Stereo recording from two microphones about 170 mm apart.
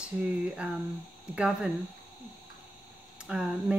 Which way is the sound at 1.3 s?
5° right (ahead or behind).